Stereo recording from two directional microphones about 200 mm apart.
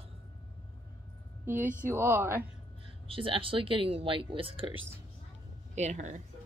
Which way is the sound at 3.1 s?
25° right (ahead or behind).